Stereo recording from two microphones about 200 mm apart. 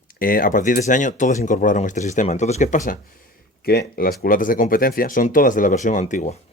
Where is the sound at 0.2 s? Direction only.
45° left (ahead or behind).